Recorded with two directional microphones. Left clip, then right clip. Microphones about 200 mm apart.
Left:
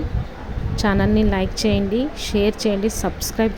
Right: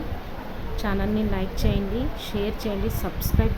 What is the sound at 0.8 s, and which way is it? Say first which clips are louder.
A woman's voice: left 8 dB; 25° left (ahead or behind).